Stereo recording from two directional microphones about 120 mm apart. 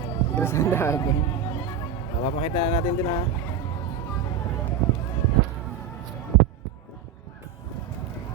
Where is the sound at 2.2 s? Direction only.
55° left (ahead or behind).